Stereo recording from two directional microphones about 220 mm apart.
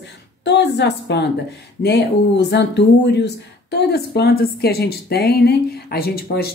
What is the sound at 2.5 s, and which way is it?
A woman's voice, 50° left (ahead or behind).